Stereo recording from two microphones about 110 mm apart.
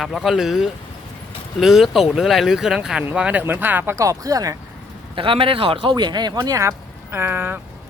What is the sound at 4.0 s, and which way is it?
Speech, 30° right (ahead or behind).